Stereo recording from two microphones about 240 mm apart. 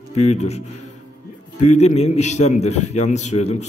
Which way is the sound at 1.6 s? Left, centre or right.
Left.